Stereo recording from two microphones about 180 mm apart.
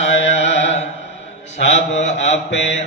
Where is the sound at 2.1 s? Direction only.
80° left.